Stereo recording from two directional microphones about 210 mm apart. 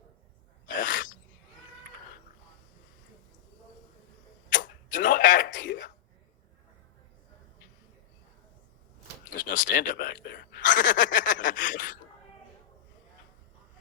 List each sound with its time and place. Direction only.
0.8 s sneeze: 40° left (ahead or behind)
4.5 s a sound: 40° left (ahead or behind)
9.3 s speech: 40° left (ahead or behind)